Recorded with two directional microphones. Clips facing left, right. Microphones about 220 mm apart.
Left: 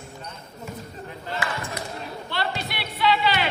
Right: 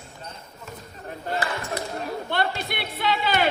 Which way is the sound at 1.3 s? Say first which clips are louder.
Right 3 dB; 35° right (ahead or behind).